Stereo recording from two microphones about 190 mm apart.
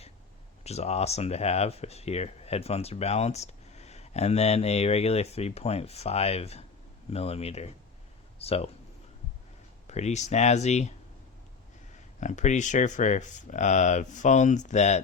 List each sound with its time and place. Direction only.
0.6 s speech: 35° left (ahead or behind)
9.8 s speech: 35° left (ahead or behind)
12.2 s speech: 40° left (ahead or behind)